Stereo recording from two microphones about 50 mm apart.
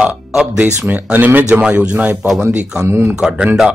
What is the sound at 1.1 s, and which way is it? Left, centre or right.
Speech, right.